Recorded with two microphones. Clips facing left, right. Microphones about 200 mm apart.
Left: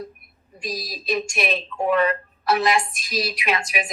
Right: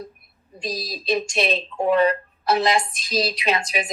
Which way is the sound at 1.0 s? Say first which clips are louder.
Right 2 dB; 25° right (ahead or behind).